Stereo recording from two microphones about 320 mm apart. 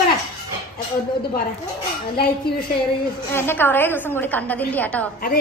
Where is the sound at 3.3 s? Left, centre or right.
Centre.